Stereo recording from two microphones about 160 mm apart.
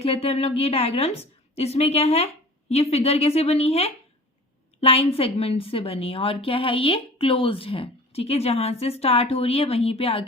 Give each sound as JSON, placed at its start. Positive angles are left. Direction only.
{"t": 0.0, "sound": "a woman's voice", "side_deg": 35}